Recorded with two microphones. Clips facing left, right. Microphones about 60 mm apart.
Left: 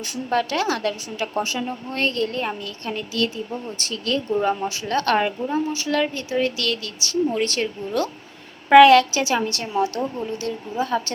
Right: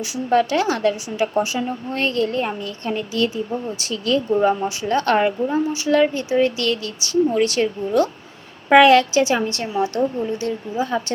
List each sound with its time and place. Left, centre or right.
0.0 s a woman's voice: centre
0.5 s speech: right
3.8 s a woman's voice: centre
4.8 s speech: right
7.3 s a woman's voice: centre
8.7 s speech: right